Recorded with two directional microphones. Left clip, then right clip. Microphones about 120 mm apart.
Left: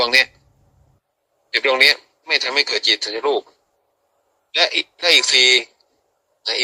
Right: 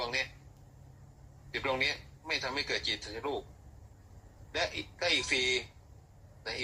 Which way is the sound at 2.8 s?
90° left.